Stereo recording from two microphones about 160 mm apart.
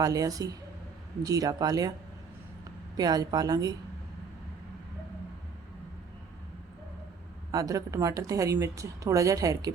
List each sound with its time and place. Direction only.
0.0 s a woman's voice: 20° right (ahead or behind)
3.0 s a woman's voice: 25° right (ahead or behind)
7.5 s a woman's voice: 20° right (ahead or behind)